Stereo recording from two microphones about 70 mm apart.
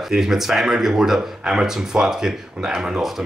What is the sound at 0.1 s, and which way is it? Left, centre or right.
Speech, centre.